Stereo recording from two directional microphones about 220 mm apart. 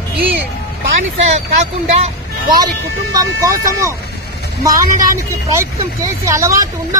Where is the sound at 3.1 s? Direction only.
15° right (ahead or behind).